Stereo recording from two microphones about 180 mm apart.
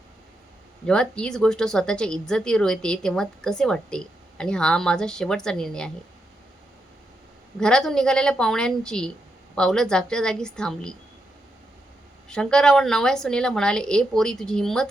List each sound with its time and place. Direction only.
0.9 s a woman's voice: 5° left (ahead or behind)
7.6 s a woman's voice: 5° left (ahead or behind)
12.3 s a woman's voice: 5° left (ahead or behind)